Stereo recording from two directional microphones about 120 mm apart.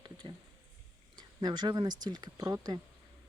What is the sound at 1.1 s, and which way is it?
Speech, 35° right (ahead or behind).